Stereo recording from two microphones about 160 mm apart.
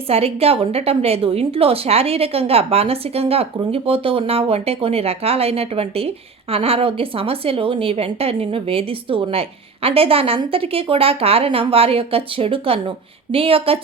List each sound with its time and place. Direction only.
0.1 s a woman's voice: 40° right (ahead or behind)